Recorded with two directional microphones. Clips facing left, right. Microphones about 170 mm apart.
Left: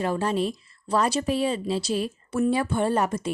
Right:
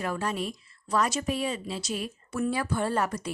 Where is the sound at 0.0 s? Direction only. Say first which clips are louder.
Left 6 dB; 30° left (ahead or behind).